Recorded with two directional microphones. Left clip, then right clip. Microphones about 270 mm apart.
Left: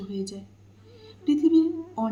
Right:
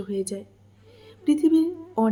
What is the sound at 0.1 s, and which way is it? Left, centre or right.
A woman's voice, right.